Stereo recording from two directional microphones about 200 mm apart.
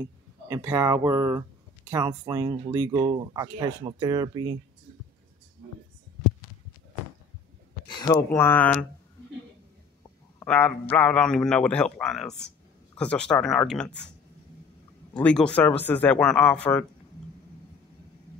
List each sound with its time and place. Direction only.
0.5 s speech: 15° right (ahead or behind)
7.9 s speech: 15° left (ahead or behind)
10.4 s a man's voice: 5° left (ahead or behind)
15.1 s speech: 5° left (ahead or behind)